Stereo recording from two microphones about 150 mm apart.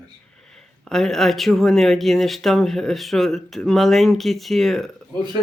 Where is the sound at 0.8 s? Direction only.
5° left (ahead or behind).